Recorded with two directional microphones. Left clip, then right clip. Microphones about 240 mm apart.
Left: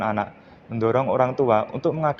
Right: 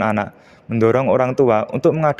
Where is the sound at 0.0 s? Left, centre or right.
Right.